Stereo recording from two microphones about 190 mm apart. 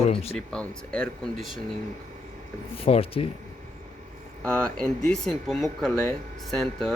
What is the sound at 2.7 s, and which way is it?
Speech, 30° left (ahead or behind).